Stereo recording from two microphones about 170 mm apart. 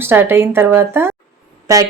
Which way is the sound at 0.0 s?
10° right (ahead or behind).